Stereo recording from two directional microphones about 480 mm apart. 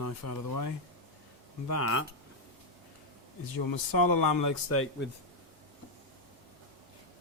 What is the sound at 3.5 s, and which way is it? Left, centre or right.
Speech, left.